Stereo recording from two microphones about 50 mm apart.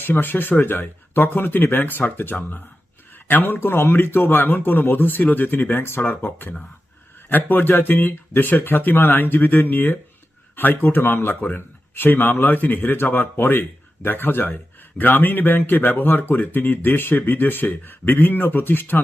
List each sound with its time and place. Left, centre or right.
0.0 s a man's voice: left